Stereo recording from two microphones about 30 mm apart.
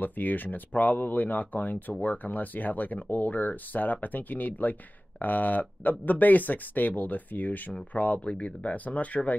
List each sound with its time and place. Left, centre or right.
0.0 s speech: left
7.9 s speech: left